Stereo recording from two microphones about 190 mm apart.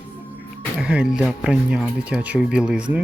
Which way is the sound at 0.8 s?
5° right (ahead or behind).